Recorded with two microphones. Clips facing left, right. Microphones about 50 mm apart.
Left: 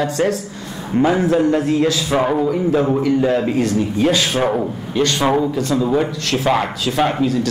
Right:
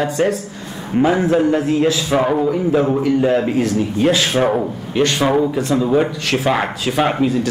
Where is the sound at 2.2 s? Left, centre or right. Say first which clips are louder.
Even; centre.